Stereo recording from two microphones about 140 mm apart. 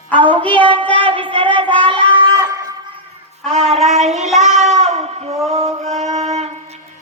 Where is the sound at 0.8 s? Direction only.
10° left (ahead or behind).